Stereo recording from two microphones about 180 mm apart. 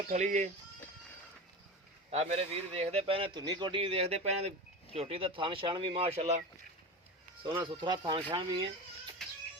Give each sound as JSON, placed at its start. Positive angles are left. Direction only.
{"t": 0.1, "sound": "speech", "side_deg": -40}
{"t": 2.0, "sound": "speech", "side_deg": -35}
{"t": 7.4, "sound": "speech", "side_deg": -25}